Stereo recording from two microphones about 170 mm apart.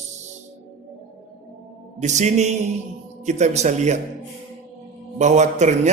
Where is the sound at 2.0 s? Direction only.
45° right (ahead or behind).